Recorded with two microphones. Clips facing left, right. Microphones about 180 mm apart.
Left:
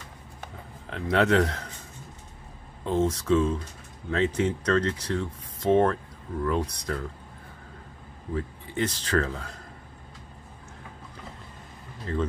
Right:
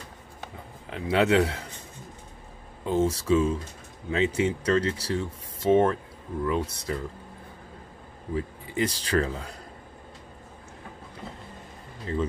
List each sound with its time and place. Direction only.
0.8 s speech: 5° right (ahead or behind)
2.8 s speech: 5° right (ahead or behind)
8.4 s speech: 10° right (ahead or behind)